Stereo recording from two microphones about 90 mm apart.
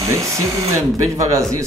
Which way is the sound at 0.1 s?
35° right (ahead or behind).